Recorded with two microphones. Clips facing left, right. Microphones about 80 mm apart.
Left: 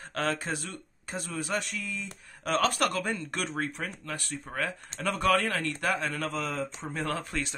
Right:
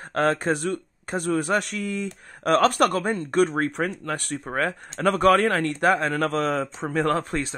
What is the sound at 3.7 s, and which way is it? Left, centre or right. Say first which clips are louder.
Speech: right 10 dB; right.